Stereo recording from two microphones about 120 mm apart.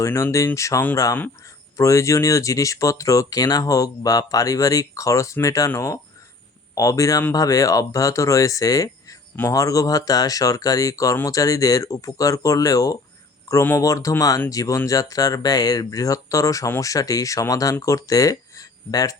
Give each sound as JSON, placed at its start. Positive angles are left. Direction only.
{"t": 0.0, "sound": "speech", "side_deg": 25}